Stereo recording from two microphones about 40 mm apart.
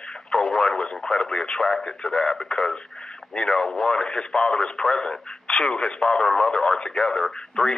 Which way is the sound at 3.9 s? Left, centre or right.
Centre.